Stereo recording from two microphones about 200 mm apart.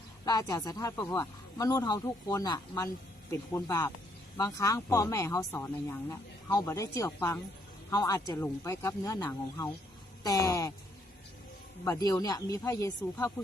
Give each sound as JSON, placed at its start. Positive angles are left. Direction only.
{"t": 0.3, "sound": "speech", "side_deg": 20}
{"t": 11.9, "sound": "speech", "side_deg": 15}